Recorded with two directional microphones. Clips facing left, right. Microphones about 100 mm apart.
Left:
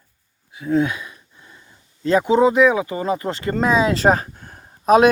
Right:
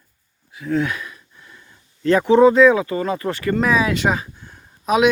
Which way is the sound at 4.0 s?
45° left (ahead or behind).